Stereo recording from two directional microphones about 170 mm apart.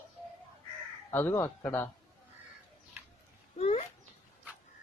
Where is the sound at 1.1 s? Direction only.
15° left (ahead or behind).